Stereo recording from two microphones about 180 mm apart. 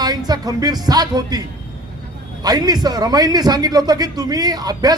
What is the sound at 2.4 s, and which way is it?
A man's voice, 20° right (ahead or behind).